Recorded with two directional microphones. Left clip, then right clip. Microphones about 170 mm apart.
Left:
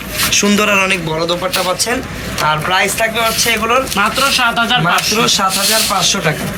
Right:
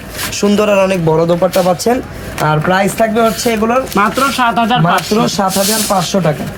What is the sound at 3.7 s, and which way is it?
Speech, 50° right (ahead or behind).